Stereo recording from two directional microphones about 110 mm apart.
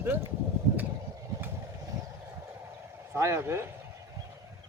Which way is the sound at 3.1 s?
25° right (ahead or behind).